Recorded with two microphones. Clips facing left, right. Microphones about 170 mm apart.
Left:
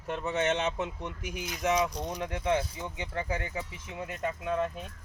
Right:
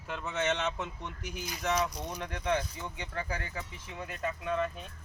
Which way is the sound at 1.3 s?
Centre (ahead or behind).